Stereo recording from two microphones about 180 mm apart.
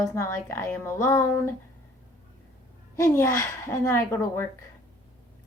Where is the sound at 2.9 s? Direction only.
15° left (ahead or behind).